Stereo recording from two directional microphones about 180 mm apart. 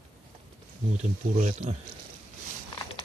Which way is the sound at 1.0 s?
40° right (ahead or behind).